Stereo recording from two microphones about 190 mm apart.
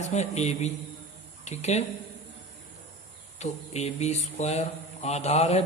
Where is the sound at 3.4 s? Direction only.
35° left (ahead or behind).